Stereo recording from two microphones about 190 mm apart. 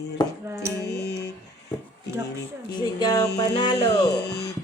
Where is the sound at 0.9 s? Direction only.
60° left (ahead or behind).